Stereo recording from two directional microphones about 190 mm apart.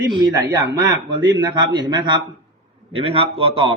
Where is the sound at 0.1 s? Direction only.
20° right (ahead or behind).